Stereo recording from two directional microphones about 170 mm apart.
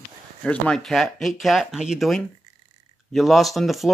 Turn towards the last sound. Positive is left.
turn(degrees=0)  # may be behind; listen again after turning